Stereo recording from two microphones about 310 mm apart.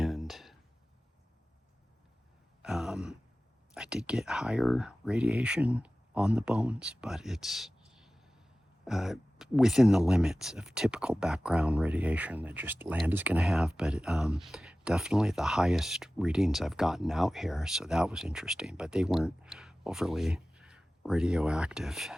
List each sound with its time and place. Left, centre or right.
0.0 s a sound: centre
2.6 s sigh: centre
3.8 s speech: centre